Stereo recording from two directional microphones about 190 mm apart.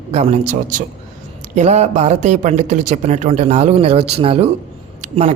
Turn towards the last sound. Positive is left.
turn(degrees=-35)  # may be behind; listen again after turning